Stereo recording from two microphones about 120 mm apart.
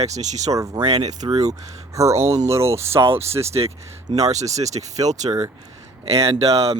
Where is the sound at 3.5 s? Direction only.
60° right (ahead or behind); by 5.4 s 75° right (ahead or behind).